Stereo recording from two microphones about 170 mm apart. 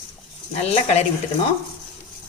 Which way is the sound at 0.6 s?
40° left (ahead or behind).